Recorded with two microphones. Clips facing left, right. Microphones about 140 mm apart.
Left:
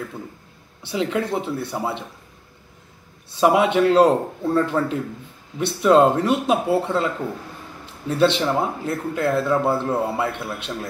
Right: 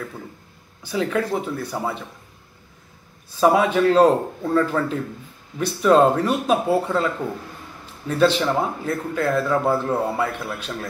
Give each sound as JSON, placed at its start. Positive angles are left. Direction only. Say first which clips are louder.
{"t": 0.8, "sound": "speech", "louder": "even", "side_deg": 25}
{"t": 3.3, "sound": "a man's voice", "louder": "even", "side_deg": 20}
{"t": 8.2, "sound": "speech", "louder": "even", "side_deg": 20}